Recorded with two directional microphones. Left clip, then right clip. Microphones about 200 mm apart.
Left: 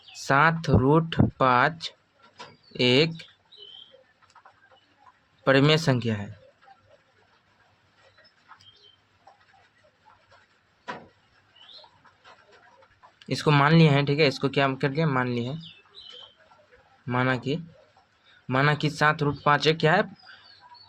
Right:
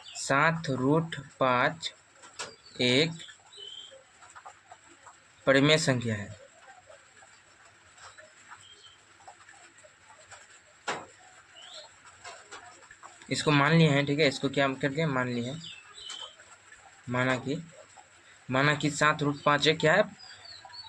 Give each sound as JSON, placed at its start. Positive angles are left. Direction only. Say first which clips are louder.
{"t": 0.1, "sound": "speech", "louder": "left 5 dB", "side_deg": 35}
{"t": 5.5, "sound": "speech", "louder": "left 2 dB", "side_deg": 35}
{"t": 13.2, "sound": "speech", "louder": "left 3 dB", "side_deg": 35}
{"t": 17.1, "sound": "speech", "louder": "left 3 dB", "side_deg": 35}